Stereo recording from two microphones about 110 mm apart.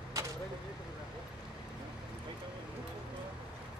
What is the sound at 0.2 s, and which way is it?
Vehicle, 30° right (ahead or behind).